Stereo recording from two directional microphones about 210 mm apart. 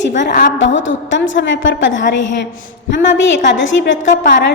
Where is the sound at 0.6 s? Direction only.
60° left (ahead or behind).